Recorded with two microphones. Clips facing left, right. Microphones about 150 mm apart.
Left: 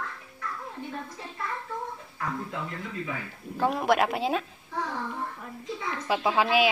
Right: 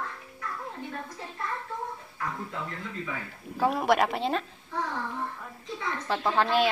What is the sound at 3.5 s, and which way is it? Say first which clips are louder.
Speech: even; centre (ahead or behind).